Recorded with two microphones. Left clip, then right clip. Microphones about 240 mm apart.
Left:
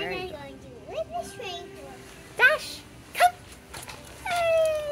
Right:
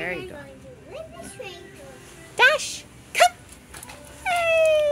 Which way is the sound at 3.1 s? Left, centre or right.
Right.